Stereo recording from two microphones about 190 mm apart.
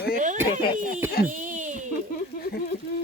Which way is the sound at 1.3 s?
45° right (ahead or behind).